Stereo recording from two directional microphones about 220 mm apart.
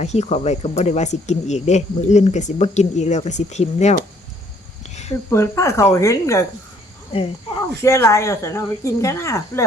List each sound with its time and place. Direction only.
0.0 s speech: 30° left (ahead or behind)
5.3 s speech: 15° left (ahead or behind)
7.8 s speech: 10° left (ahead or behind)